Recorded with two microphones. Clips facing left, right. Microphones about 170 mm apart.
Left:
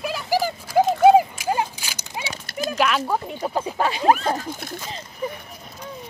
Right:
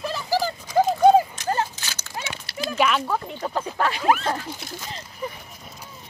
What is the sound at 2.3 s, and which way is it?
Dog, 40° left (ahead or behind).